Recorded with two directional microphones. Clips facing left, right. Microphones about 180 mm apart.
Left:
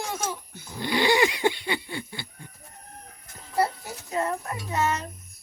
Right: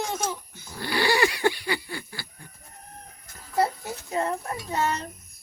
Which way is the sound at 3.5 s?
25° right (ahead or behind).